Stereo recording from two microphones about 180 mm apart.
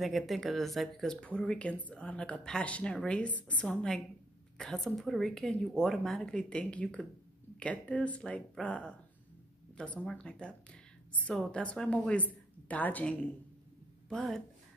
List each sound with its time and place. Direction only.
0.0 s a woman's voice: centre (ahead or behind)
9.9 s a woman's voice: 5° left (ahead or behind)